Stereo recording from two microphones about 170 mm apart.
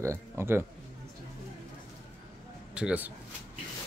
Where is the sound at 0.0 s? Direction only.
15° right (ahead or behind).